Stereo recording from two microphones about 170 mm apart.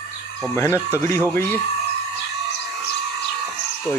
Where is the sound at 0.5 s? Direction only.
15° left (ahead or behind).